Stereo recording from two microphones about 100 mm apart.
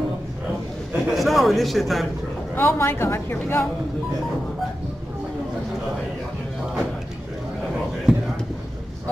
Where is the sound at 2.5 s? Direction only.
25° left (ahead or behind).